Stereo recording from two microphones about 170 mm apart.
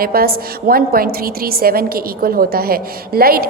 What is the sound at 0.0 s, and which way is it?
A woman's voice, 60° right (ahead or behind).